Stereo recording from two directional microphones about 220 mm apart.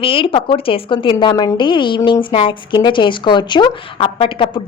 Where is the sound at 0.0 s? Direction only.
25° left (ahead or behind).